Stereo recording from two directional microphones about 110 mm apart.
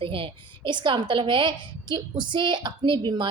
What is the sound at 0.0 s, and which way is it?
A woman's voice, 55° right (ahead or behind).